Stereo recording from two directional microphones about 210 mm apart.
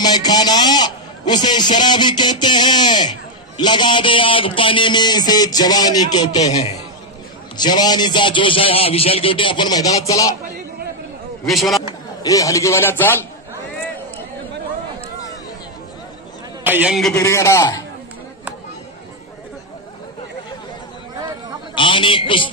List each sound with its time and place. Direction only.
0.0 s speech: 20° left (ahead or behind)
11.4 s a man's voice: centre (ahead or behind)
11.8 s a man's voice: 20° left (ahead or behind)
16.6 s a man's voice: 5° right (ahead or behind)
17.1 s a man's voice: 15° left (ahead or behind)
21.7 s speech: 25° left (ahead or behind)